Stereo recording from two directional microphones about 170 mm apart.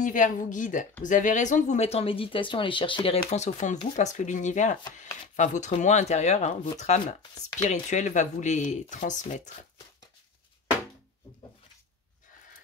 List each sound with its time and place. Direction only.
0.0 s speech: 50° left (ahead or behind)
7.3 s speech: 20° left (ahead or behind)
7.9 s speech: 45° left (ahead or behind)